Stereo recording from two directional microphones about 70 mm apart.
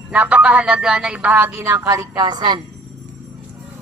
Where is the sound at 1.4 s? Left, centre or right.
Right.